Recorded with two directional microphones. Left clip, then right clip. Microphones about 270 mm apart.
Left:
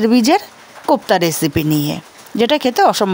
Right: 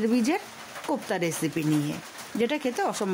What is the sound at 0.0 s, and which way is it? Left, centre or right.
Speech, left.